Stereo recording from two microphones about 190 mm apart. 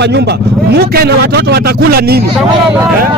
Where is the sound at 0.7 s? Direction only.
60° right (ahead or behind).